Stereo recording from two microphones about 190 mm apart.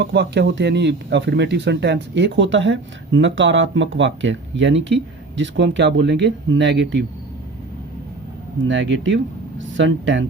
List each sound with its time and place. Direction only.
0.0 s speech: 60° right (ahead or behind)
8.6 s speech: 75° right (ahead or behind)